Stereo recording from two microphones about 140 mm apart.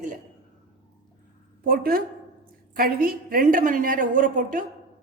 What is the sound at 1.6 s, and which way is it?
A woman's voice, 90° right.